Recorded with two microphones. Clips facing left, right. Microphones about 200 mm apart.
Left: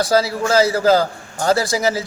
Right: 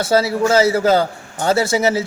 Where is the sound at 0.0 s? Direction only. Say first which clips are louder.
Right 2 dB; 25° right (ahead or behind).